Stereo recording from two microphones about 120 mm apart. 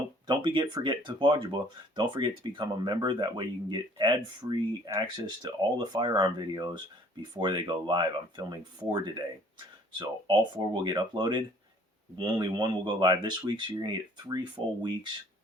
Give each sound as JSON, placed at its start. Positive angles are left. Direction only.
{"t": 0.3, "sound": "speech", "side_deg": -40}